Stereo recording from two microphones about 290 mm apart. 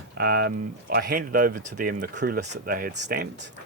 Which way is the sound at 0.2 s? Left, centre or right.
Right.